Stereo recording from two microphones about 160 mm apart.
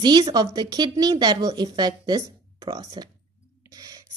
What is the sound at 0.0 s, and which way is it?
Speech, 25° right (ahead or behind).